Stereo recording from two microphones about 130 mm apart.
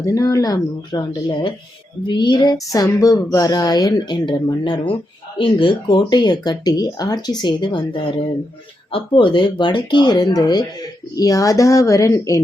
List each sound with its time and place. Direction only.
0.0 s speech: 25° left (ahead or behind)